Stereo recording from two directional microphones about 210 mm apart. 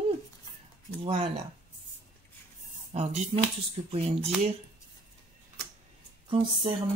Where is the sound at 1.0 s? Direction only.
30° right (ahead or behind).